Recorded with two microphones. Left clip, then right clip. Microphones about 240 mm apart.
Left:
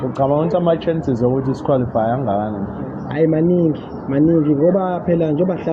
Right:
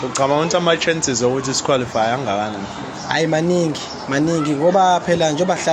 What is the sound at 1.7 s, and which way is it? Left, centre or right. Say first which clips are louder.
Speech: even; right.